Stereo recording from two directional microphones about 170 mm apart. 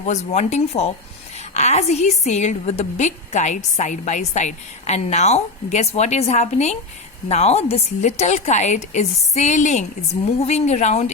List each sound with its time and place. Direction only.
0.0 s a woman's voice: 45° left (ahead or behind)